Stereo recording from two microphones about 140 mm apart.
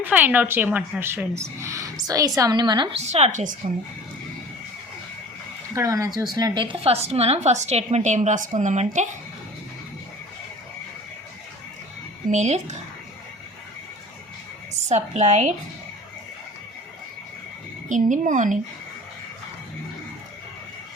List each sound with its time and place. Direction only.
0.0 s a woman's voice: 10° right (ahead or behind); by 2.9 s 30° right (ahead or behind)
2.9 s a woman's voice: 50° right (ahead or behind)
5.7 s a woman's voice: 20° right (ahead or behind)
6.9 s a woman's voice: 50° right (ahead or behind)
12.3 s a woman's voice: 55° right (ahead or behind)
14.8 s a woman's voice: 55° right (ahead or behind)
17.8 s speech: 65° right (ahead or behind)